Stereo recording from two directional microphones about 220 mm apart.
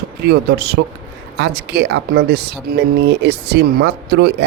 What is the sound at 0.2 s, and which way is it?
Speech, 45° right (ahead or behind).